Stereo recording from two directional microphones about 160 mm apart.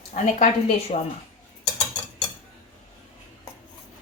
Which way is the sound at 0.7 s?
40° left (ahead or behind).